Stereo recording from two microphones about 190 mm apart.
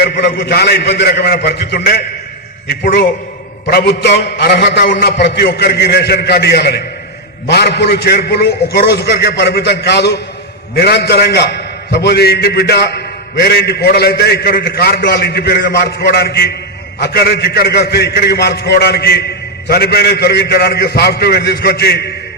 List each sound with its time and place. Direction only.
0.0 s a man's voice: 60° left (ahead or behind)